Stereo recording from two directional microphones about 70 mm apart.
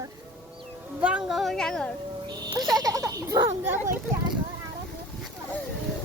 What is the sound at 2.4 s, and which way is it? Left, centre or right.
Speech, right.